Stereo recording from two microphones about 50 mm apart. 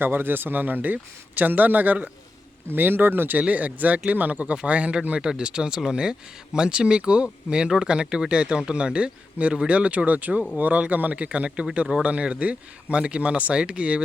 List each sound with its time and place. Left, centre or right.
0.0 s speech: right
3.4 s speech: right